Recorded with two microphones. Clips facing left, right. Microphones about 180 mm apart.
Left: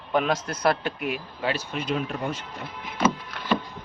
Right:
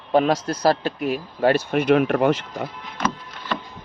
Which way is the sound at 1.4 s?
55° right (ahead or behind).